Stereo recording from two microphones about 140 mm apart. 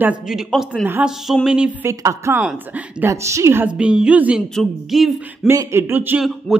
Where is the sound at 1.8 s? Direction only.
20° right (ahead or behind).